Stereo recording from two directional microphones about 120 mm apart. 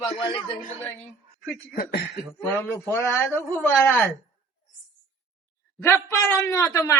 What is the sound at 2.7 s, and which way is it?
A man's voice, 20° left (ahead or behind).